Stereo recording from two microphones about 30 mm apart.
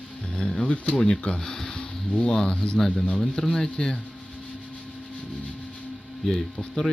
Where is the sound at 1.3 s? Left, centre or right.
Left.